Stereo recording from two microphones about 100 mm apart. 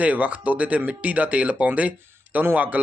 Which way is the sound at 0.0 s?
15° right (ahead or behind).